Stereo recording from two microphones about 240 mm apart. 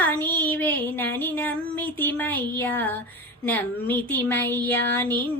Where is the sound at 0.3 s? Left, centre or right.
Centre.